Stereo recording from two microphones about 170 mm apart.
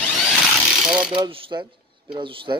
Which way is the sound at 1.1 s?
25° right (ahead or behind).